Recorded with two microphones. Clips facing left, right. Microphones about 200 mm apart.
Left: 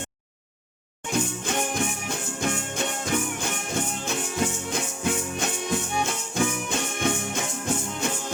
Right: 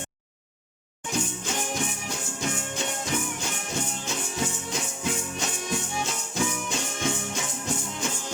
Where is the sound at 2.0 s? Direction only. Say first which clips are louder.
Left 3 dB; 55° left (ahead or behind).